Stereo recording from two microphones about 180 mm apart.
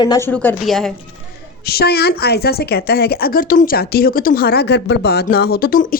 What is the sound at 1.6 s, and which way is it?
A woman's voice, 60° left (ahead or behind).